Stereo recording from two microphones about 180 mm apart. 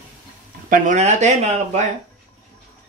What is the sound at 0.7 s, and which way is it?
Speech, 45° right (ahead or behind).